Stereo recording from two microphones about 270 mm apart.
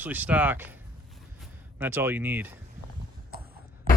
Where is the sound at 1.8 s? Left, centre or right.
Centre.